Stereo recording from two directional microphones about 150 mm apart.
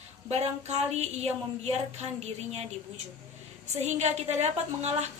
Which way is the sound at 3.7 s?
50° right (ahead or behind).